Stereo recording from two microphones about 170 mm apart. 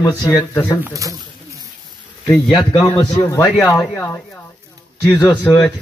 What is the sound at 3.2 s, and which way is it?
Speech, 15° left (ahead or behind).